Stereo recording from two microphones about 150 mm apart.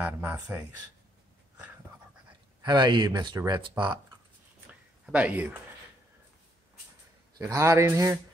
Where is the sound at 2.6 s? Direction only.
30° right (ahead or behind).